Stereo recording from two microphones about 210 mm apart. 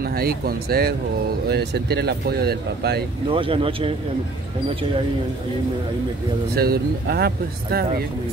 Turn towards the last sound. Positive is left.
turn(degrees=-50)  # may be behind; listen again after turning